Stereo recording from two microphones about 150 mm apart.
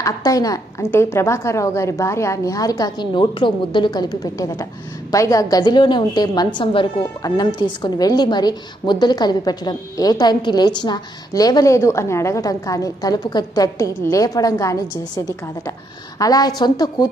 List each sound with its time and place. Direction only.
0.0 s a woman's voice: 25° left (ahead or behind)